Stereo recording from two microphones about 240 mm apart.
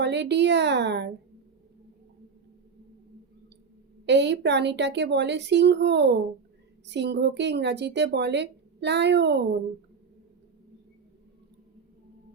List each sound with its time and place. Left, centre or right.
0.0 s a woman's voice: right
4.0 s a woman's voice: right